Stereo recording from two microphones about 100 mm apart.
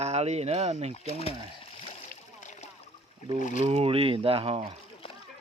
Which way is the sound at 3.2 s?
85° right.